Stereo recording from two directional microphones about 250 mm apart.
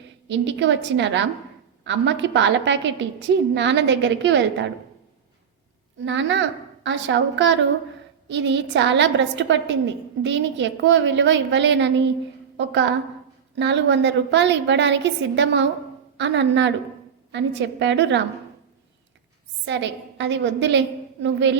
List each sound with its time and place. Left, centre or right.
0.3 s a woman's voice: right
6.1 s a woman's voice: right
13.6 s a woman's voice: right
19.6 s a woman's voice: right